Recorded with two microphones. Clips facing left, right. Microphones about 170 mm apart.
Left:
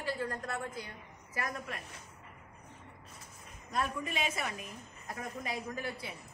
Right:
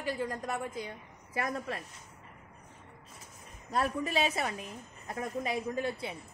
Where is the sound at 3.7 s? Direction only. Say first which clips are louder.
Right 5 dB; 30° right (ahead or behind).